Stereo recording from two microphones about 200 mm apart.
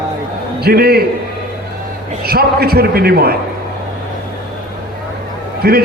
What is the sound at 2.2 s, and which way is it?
A man's voice, 50° right (ahead or behind).